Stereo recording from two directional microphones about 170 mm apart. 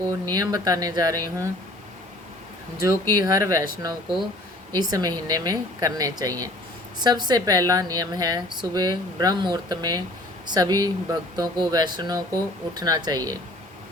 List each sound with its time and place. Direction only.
0.1 s a woman's voice: 20° right (ahead or behind)
3.2 s a woman's voice: 20° right (ahead or behind)